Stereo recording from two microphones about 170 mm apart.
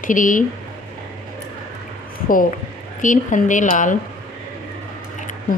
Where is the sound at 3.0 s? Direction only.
50° left (ahead or behind).